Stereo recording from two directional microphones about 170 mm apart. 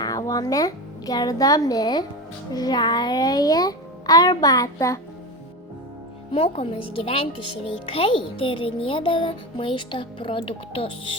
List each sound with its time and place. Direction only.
0.0 s a child's voice: 20° left (ahead or behind)
6.3 s speech: 30° left (ahead or behind)